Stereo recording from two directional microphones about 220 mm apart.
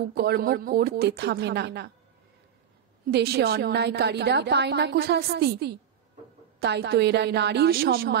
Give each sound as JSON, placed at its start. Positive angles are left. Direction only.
{"t": 0.1, "sound": "a woman's voice", "side_deg": -45}
{"t": 3.1, "sound": "a woman's voice", "side_deg": -50}